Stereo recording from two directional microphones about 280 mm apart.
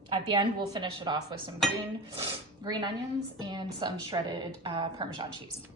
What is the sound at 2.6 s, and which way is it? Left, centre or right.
A woman's voice, centre.